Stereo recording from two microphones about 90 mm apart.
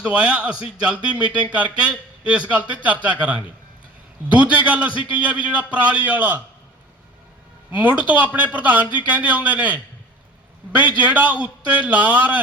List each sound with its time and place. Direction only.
0.0 s speech: 10° right (ahead or behind)
7.8 s speech: 15° right (ahead or behind)